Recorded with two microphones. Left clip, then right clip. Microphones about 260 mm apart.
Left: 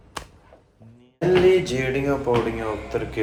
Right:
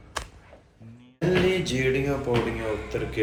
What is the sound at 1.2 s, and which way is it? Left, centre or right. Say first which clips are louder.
A man's voice: left 6 dB; centre.